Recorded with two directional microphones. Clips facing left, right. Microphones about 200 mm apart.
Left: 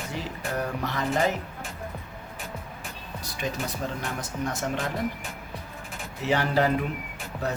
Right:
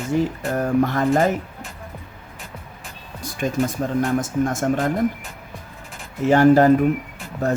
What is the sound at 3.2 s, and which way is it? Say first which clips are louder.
Speech: right 10 dB; 50° right (ahead or behind).